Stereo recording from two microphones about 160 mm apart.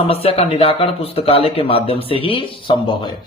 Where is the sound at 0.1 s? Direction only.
40° left (ahead or behind).